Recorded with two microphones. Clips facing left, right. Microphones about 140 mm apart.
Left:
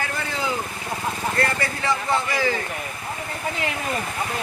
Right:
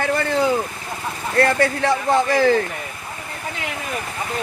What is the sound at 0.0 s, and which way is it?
Vehicle, 60° right (ahead or behind).